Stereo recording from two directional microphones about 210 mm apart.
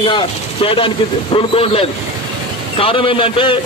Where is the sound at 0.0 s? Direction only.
25° left (ahead or behind).